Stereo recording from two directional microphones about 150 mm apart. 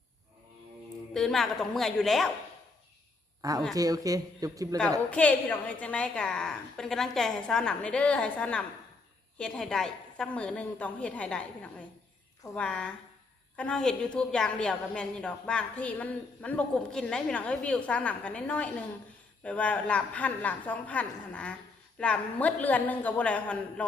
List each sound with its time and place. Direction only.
1.1 s a woman's voice: centre (ahead or behind)
3.4 s speech: 25° right (ahead or behind)
5.1 s a woman's voice: 10° left (ahead or behind)